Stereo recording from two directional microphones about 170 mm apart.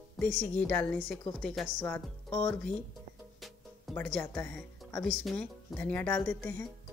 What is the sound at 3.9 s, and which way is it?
Speech, 5° left (ahead or behind).